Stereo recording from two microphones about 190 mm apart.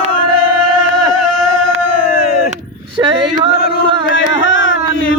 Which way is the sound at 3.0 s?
15° right (ahead or behind).